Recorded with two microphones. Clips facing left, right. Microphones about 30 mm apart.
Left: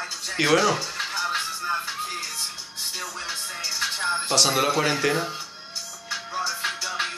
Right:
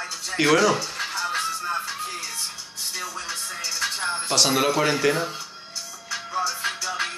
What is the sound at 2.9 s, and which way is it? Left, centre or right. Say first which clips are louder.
Music: right 2 dB; left.